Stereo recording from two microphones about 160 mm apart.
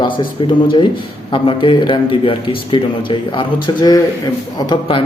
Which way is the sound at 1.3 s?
35° left (ahead or behind).